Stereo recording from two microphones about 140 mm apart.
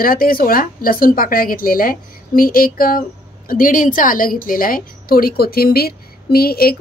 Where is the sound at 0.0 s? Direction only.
90° left.